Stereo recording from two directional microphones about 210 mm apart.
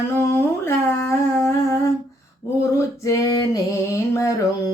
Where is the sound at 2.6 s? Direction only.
15° left (ahead or behind).